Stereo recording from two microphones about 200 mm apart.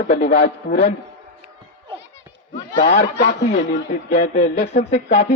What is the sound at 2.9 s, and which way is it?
Speech, 50° left (ahead or behind).